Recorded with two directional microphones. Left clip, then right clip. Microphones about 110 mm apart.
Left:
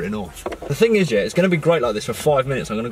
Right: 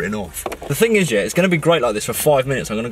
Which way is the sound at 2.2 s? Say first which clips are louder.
Right 3 dB; centre (ahead or behind).